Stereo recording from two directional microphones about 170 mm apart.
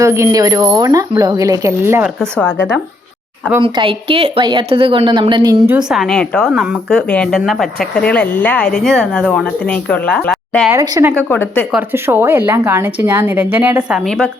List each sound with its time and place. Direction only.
0.0 s speech: 15° right (ahead or behind)
3.6 s a woman's voice: 30° right (ahead or behind)
5.6 s speech: 5° right (ahead or behind)
10.7 s a woman's voice: 15° right (ahead or behind)
11.3 s speech: 10° left (ahead or behind)
11.7 s a woman's voice: 10° right (ahead or behind)
14.0 s speech: 5° left (ahead or behind)